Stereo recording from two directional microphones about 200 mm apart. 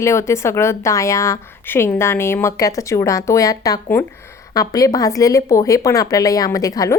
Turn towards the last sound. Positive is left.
turn(degrees=15)  # may be behind; listen again after turning